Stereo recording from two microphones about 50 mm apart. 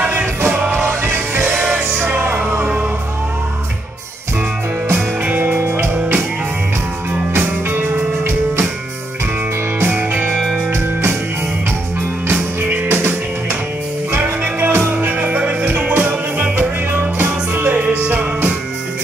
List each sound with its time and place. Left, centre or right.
0.5 s music: right
1.0 s music: right
1.4 s music: centre
1.7 s music: right
5.2 s music: right
7.3 s music: right
9.8 s music: right
10.3 s music: centre
12.3 s music: right
12.8 s music: right
14.6 s music: right
15.0 s music: right